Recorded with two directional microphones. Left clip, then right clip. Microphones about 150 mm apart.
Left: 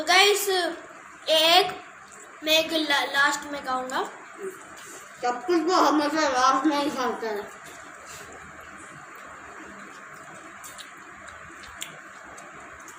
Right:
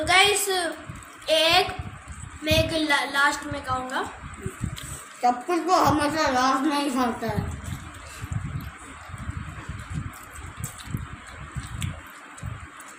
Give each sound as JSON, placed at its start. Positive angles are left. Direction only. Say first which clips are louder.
{"t": 0.0, "sound": "a woman's voice", "louder": "even", "side_deg": 10}
{"t": 5.2, "sound": "speech", "louder": "right 2 dB", "side_deg": -25}